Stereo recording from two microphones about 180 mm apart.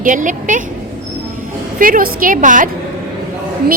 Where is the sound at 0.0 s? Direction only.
45° right (ahead or behind).